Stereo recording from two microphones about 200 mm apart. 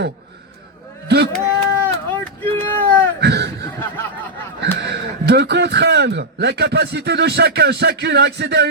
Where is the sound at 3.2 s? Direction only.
55° right (ahead or behind).